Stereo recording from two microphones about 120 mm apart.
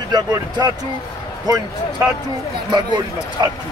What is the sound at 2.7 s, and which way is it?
Speech, 35° right (ahead or behind).